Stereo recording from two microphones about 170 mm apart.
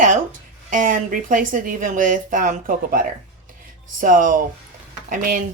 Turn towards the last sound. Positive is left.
turn(degrees=-50)  # may be behind; listen again after turning